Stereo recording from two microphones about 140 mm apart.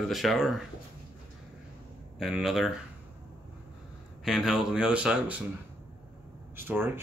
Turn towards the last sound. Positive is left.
turn(degrees=-15)  # may be behind; listen again after turning